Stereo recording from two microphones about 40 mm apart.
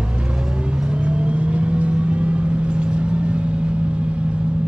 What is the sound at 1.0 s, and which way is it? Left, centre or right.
Vehicle, right.